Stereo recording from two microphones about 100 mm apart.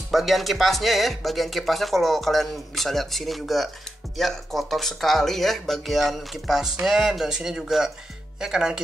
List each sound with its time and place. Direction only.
0.1 s speech: centre (ahead or behind)